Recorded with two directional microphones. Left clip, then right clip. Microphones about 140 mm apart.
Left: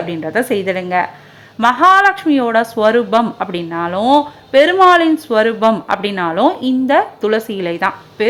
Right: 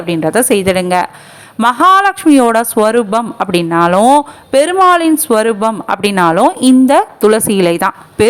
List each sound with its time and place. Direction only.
0.1 s a woman's voice: 35° right (ahead or behind)